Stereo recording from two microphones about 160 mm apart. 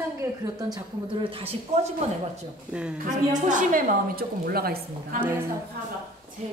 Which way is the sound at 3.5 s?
55° right (ahead or behind).